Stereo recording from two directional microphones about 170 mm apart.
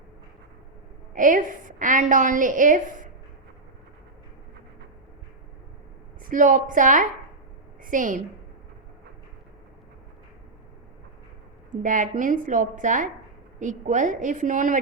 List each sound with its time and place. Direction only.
1.1 s a woman's voice: 50° right (ahead or behind)
6.3 s a woman's voice: 50° right (ahead or behind)
11.7 s a woman's voice: 50° right (ahead or behind)